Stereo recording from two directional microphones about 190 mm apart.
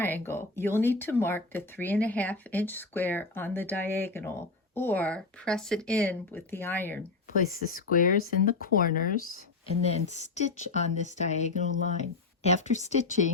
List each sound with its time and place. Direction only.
0.0 s speech: 10° left (ahead or behind)
7.5 s speech: 50° left (ahead or behind)
9.8 s speech: 35° left (ahead or behind)